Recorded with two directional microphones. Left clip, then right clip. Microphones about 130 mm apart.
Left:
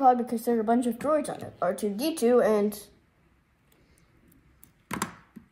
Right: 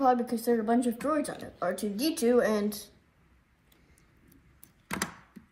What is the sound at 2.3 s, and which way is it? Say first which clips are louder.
Speech: left 4 dB; 25° left (ahead or behind).